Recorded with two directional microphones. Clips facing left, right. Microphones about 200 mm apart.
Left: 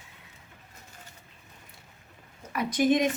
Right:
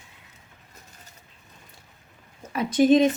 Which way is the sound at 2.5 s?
25° right (ahead or behind).